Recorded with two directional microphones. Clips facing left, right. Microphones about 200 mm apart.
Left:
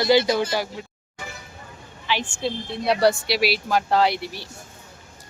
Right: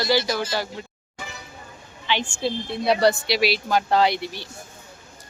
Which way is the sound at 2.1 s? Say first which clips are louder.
Right 1 dB; 5° left (ahead or behind).